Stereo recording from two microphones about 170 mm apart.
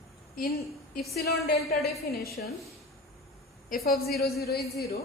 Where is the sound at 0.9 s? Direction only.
65° left (ahead or behind).